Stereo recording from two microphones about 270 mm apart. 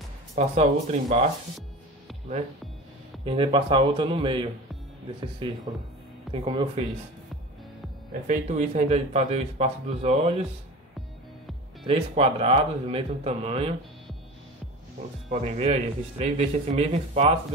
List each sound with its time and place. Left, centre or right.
0.4 s speech: right
3.3 s a man's voice: centre
8.1 s speech: right
11.8 s speech: right
15.3 s speech: right